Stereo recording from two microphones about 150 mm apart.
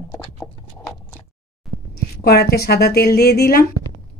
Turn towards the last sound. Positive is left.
turn(degrees=85)